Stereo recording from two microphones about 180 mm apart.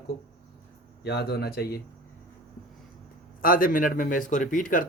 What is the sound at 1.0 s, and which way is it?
Speech, 65° left (ahead or behind).